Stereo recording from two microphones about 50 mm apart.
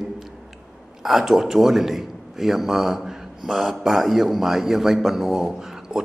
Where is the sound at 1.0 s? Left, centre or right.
Centre.